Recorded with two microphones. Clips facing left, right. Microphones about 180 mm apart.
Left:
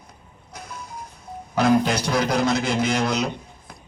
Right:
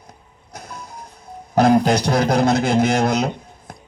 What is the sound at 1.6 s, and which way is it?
A man's voice, 40° right (ahead or behind).